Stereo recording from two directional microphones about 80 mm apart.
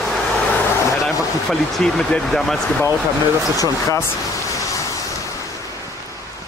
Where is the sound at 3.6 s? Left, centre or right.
Left.